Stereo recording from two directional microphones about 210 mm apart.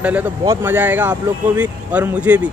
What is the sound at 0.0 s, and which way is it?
Speech, 5° right (ahead or behind).